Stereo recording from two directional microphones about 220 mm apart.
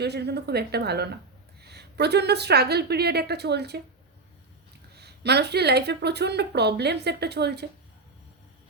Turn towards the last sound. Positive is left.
turn(degrees=-50)  # may be behind; listen again after turning